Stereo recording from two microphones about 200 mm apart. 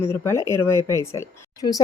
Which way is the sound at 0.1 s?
15° left (ahead or behind).